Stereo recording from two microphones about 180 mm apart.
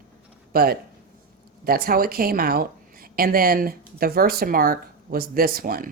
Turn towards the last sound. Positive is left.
turn(degrees=-55)  # may be behind; listen again after turning